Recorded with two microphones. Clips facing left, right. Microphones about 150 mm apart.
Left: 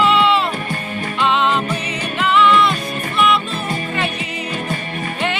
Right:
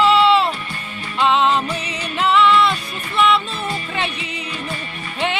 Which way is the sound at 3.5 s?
45° left (ahead or behind).